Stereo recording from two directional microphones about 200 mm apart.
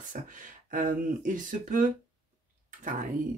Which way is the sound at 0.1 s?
40° right (ahead or behind).